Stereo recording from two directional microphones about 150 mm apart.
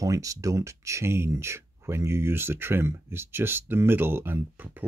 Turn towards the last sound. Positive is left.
turn(degrees=-15)  # may be behind; listen again after turning